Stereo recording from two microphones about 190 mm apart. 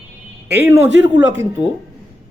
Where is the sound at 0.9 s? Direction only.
70° left (ahead or behind).